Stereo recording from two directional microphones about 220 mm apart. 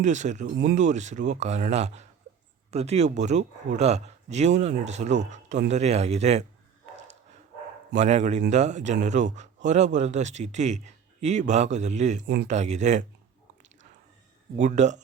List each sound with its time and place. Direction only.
0.0 s a man's voice: 35° right (ahead or behind)
7.9 s a man's voice: 30° right (ahead or behind)
14.6 s a man's voice: 35° right (ahead or behind)